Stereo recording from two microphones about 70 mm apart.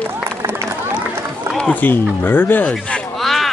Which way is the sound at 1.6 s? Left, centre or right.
Left.